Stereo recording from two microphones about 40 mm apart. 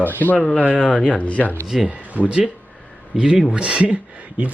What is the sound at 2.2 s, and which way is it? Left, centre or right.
Speech, right.